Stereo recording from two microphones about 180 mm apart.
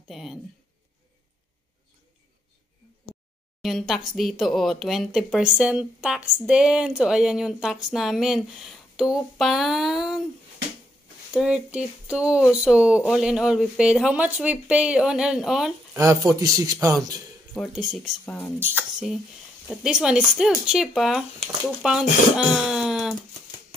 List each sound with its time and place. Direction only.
0.1 s speech: centre (ahead or behind)
3.6 s speech: centre (ahead or behind)
11.3 s speech: 5° right (ahead or behind)
16.4 s speech: 20° right (ahead or behind)
17.6 s speech: centre (ahead or behind)
18.6 s speech: 10° right (ahead or behind)